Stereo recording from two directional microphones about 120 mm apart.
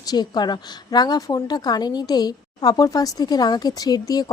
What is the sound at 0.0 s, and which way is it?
A woman's voice, 35° left (ahead or behind).